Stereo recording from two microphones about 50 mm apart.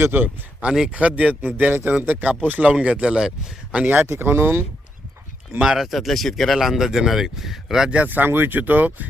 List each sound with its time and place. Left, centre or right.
0.0 s speech: right
0.6 s speech: right
4.0 s speech: right
5.6 s speech: centre
7.9 s speech: right